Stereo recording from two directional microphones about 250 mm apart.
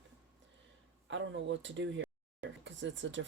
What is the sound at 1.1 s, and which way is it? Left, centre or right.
Speech, right.